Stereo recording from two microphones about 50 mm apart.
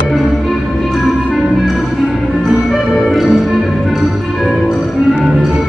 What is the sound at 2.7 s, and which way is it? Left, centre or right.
Music, centre.